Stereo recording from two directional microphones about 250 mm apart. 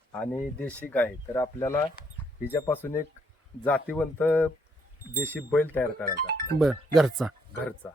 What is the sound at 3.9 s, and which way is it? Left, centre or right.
Speech, centre.